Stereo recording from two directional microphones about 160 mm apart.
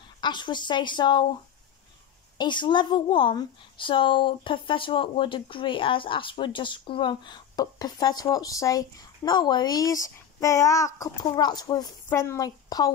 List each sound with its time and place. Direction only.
0.2 s a woman's voice: 30° left (ahead or behind)
2.3 s a woman's voice: 30° left (ahead or behind)